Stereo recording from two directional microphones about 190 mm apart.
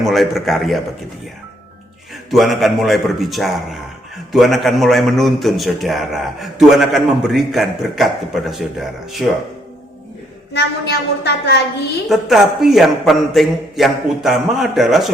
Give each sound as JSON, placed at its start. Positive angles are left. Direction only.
{"t": 0.0, "sound": "a man's voice", "side_deg": 0}
{"t": 2.3, "sound": "a man's voice", "side_deg": 0}
{"t": 10.5, "sound": "a woman's voice", "side_deg": 60}
{"t": 12.0, "sound": "a man's voice", "side_deg": 0}